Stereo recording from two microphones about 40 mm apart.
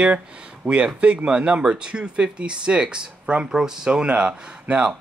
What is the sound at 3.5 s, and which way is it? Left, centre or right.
Speech, centre.